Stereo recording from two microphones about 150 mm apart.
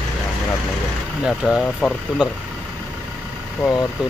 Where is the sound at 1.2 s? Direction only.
5° right (ahead or behind).